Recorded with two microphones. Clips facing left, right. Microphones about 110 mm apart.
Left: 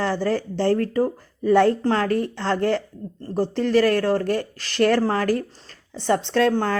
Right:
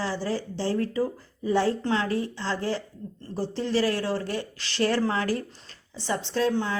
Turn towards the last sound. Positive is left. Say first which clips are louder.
# left 5 dB
turn(degrees=55)  # may be behind; listen again after turning